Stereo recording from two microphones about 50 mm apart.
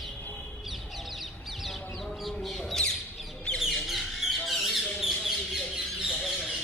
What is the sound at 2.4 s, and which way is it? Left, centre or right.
Bird, centre.